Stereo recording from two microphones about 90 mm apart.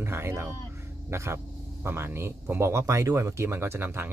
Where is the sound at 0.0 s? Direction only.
30° right (ahead or behind).